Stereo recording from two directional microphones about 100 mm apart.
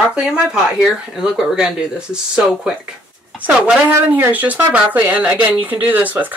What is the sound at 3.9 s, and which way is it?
Speech, 20° right (ahead or behind).